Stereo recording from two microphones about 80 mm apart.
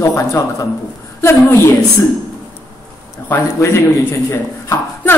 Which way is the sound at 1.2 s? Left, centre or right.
Left.